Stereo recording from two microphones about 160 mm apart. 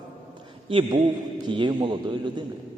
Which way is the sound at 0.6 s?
35° right (ahead or behind).